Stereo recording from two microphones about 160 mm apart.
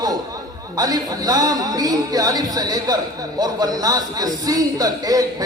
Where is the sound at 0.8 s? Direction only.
25° right (ahead or behind).